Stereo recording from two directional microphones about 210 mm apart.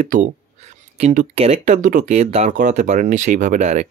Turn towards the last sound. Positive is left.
turn(degrees=-35)  # may be behind; listen again after turning